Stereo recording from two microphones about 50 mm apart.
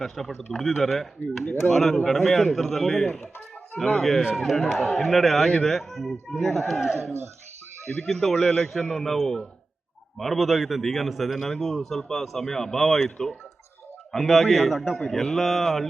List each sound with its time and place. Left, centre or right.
0.0 s a man's voice: centre
7.0 s speech: right
8.0 s a man's voice: centre
8.4 s a man's voice: centre
8.6 s a man's voice: centre
13.1 s a man's voice: centre
14.1 s a man's voice: centre